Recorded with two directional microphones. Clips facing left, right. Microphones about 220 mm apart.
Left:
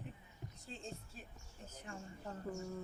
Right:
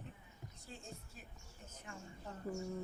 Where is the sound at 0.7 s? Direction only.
30° left (ahead or behind).